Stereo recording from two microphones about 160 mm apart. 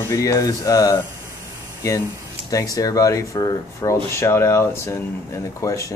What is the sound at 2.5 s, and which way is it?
Speech, 20° left (ahead or behind).